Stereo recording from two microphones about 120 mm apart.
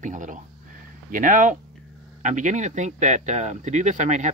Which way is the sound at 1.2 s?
90° right.